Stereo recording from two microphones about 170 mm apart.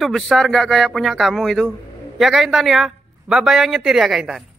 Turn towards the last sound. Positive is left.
turn(degrees=0)  # may be behind; listen again after turning